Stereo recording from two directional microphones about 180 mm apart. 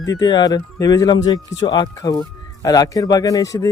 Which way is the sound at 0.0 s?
20° left (ahead or behind).